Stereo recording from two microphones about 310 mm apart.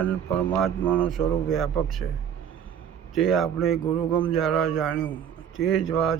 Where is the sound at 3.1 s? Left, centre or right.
Centre.